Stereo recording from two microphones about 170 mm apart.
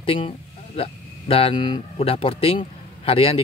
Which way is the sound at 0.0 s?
30° left (ahead or behind).